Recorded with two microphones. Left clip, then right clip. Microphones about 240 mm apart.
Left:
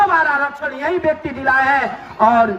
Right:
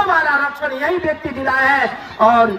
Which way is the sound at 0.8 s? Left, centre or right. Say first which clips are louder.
Left 3 dB; left.